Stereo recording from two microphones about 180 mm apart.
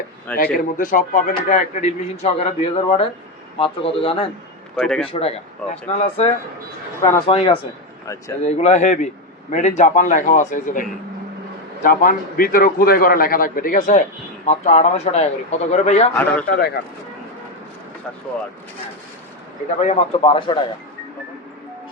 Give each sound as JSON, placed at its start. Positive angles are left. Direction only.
{"t": 0.3, "sound": "speech", "side_deg": 50}
{"t": 4.8, "sound": "speech", "side_deg": 5}
{"t": 5.0, "sound": "speech", "side_deg": 35}
{"t": 16.1, "sound": "a man's voice", "side_deg": 10}
{"t": 16.5, "sound": "speech", "side_deg": 60}
{"t": 19.8, "sound": "speech", "side_deg": 35}